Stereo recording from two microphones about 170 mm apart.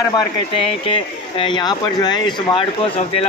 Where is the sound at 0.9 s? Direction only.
30° left (ahead or behind).